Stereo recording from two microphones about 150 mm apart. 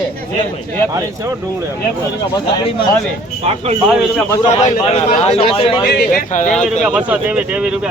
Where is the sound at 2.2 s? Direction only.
30° left (ahead or behind).